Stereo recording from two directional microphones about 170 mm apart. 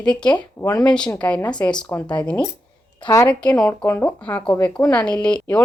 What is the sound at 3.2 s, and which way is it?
Speech, 5° left (ahead or behind).